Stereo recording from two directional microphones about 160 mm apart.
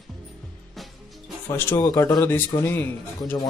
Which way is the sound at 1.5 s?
15° left (ahead or behind).